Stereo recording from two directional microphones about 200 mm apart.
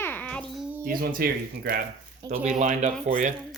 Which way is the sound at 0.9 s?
45° right (ahead or behind).